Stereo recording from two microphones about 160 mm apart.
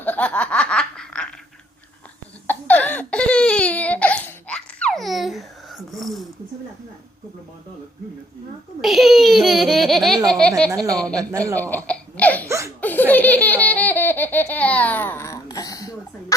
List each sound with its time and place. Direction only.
0.0 s snicker: 10° left (ahead or behind)
2.5 s crying: 10° left (ahead or behind)
8.8 s a child's voice: centre (ahead or behind)
11.9 s a sound: 10° left (ahead or behind)
12.5 s laughter: 20° right (ahead or behind)
12.8 s laughter: 10° left (ahead or behind)